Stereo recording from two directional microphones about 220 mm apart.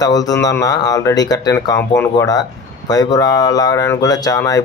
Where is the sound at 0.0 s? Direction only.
15° left (ahead or behind).